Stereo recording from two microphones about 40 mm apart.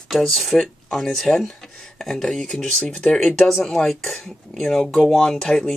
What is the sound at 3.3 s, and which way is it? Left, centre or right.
Speech, centre.